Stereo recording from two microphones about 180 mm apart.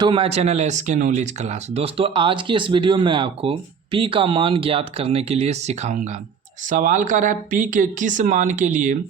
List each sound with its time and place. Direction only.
0.0 s speech: 30° right (ahead or behind); by 9.0 s 45° right (ahead or behind)